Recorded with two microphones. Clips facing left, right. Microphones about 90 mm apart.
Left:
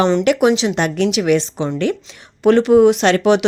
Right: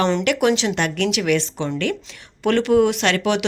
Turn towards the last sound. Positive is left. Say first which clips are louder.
# left 6 dB
turn(degrees=25)  # may be behind; listen again after turning